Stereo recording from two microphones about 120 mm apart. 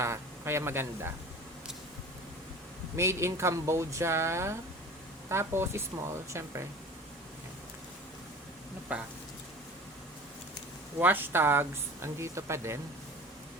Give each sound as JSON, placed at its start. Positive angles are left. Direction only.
{"t": 0.0, "sound": "speech", "side_deg": -25}
{"t": 2.9, "sound": "speech", "side_deg": -25}
{"t": 8.9, "sound": "speech", "side_deg": -10}
{"t": 11.0, "sound": "speech", "side_deg": -15}